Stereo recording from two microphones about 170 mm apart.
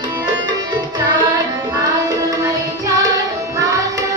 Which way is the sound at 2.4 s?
20° right (ahead or behind).